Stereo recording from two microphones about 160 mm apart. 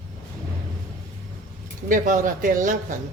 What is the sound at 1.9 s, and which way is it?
Speech, 55° right (ahead or behind).